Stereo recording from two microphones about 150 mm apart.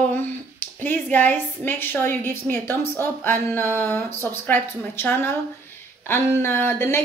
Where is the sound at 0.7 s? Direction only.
10° left (ahead or behind).